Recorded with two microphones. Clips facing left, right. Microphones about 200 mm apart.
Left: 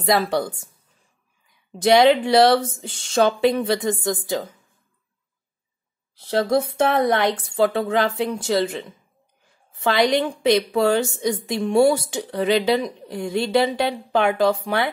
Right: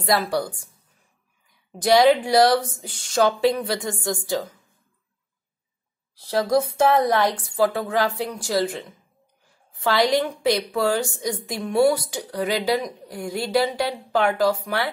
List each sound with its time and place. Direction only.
0.0 s a woman's voice: 25° left (ahead or behind)
1.8 s a woman's voice: 25° left (ahead or behind)
6.1 s a woman's voice: 25° left (ahead or behind)